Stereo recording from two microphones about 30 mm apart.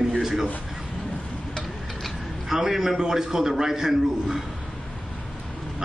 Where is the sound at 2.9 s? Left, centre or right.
Right.